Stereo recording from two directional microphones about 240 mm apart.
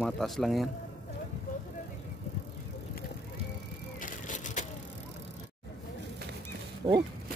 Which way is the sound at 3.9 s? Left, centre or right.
Left.